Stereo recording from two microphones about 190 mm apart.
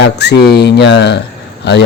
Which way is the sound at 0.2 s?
60° left (ahead or behind).